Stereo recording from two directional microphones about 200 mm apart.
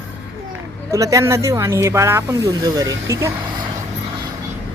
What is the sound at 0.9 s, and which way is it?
Speech, 15° right (ahead or behind).